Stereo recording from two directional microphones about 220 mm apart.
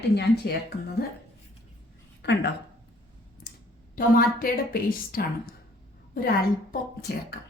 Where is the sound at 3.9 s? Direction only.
40° left (ahead or behind).